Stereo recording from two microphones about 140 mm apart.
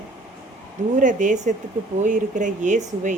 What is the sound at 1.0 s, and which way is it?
Speech, 65° right (ahead or behind).